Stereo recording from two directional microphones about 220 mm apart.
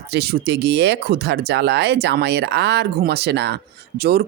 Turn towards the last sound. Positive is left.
turn(degrees=-45)  # may be behind; listen again after turning